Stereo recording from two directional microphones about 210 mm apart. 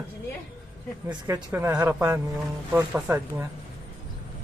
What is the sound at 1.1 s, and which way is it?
Speech, 20° right (ahead or behind).